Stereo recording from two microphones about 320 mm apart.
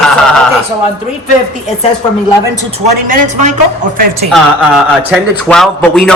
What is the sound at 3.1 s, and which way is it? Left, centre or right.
Speech, right.